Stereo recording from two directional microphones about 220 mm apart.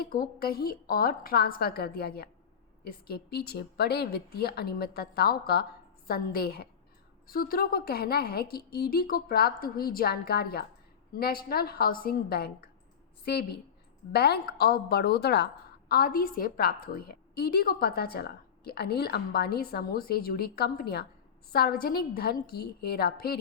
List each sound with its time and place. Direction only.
0.0 s a woman's voice: 40° left (ahead or behind)